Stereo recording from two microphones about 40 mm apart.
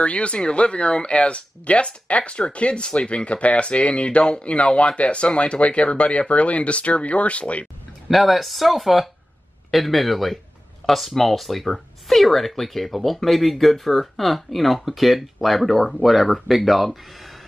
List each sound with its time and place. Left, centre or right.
0.0 s speech: left
8.1 s speech: centre